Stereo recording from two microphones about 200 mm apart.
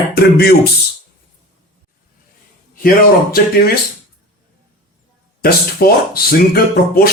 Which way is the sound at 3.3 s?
50° left (ahead or behind).